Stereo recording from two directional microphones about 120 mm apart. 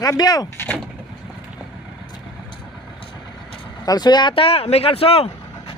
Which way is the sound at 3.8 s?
35° left (ahead or behind).